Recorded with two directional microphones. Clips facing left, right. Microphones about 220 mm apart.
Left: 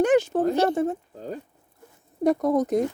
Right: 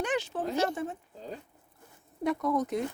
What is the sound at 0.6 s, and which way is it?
Speech, 40° left (ahead or behind).